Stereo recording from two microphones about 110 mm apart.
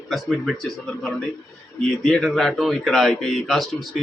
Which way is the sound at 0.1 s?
Centre (ahead or behind).